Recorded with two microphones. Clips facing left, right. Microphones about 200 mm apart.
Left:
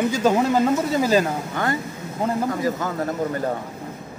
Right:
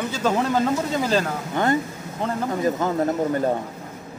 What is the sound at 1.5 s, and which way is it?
Speech, 20° right (ahead or behind).